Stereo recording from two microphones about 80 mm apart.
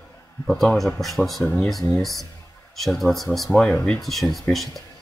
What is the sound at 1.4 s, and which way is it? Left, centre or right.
Speech, left.